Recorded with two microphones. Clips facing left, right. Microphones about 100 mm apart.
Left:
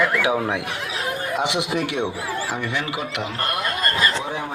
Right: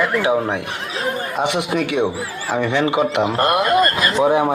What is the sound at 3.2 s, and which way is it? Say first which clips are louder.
Speech: right 9 dB; 50° right (ahead or behind).